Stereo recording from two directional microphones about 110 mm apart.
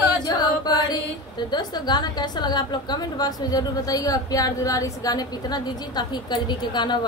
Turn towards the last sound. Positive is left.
turn(degrees=40)  # may be behind; listen again after turning